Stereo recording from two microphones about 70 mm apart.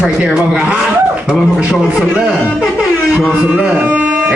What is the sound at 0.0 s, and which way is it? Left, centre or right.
A man's voice, centre.